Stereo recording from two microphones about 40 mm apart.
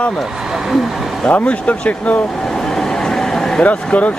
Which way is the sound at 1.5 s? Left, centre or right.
Left.